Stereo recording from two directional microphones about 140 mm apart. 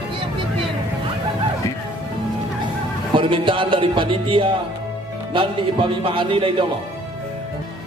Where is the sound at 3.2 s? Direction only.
35° right (ahead or behind).